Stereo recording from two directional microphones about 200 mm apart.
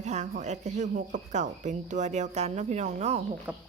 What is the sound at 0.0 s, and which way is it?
Speech, 35° right (ahead or behind).